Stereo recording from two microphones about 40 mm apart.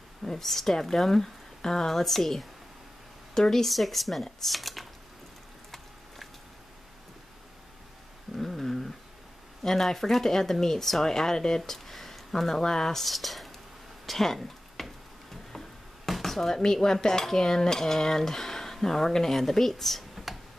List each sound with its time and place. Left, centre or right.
0.2 s dishes: centre
3.6 s speech: centre
8.4 s dog: centre
9.6 s dishes: centre
14.0 s a sound: centre
16.1 s dishes: centre